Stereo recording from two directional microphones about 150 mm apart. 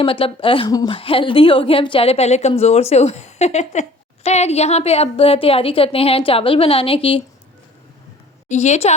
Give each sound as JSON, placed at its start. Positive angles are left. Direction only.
{"t": 0.0, "sound": "a woman's voice", "side_deg": 35}
{"t": 8.4, "sound": "a woman's voice", "side_deg": 50}